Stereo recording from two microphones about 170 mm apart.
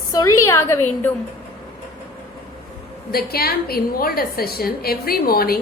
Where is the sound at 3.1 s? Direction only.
65° left (ahead or behind).